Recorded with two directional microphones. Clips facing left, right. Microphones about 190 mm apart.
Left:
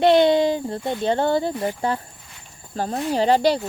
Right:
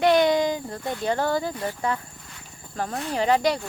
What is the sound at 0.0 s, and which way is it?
Speech, 25° left (ahead or behind).